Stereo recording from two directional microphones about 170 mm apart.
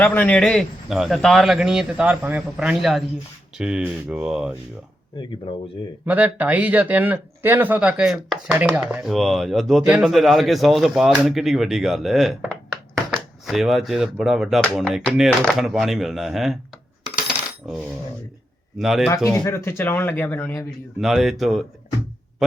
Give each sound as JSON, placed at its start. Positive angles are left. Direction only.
{"t": 0.0, "sound": "speech", "side_deg": 10}
{"t": 5.5, "sound": "speech", "side_deg": 30}
{"t": 6.1, "sound": "speech", "side_deg": -10}
{"t": 17.2, "sound": "coin", "side_deg": -5}
{"t": 18.8, "sound": "speech", "side_deg": 0}
{"t": 19.1, "sound": "speech", "side_deg": 15}
{"t": 21.0, "sound": "speech", "side_deg": 0}